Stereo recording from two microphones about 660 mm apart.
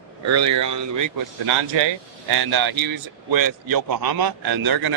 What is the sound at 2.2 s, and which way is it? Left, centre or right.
A man's voice, right.